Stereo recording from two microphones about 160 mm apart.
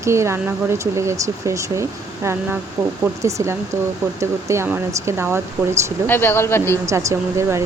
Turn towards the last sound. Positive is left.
turn(degrees=-15)  # may be behind; listen again after turning